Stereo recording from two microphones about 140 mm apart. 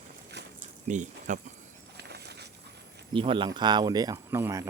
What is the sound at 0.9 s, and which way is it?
Speech, 60° right (ahead or behind).